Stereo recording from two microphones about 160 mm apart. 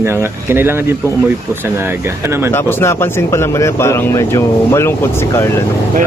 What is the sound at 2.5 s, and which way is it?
Speech, 15° left (ahead or behind).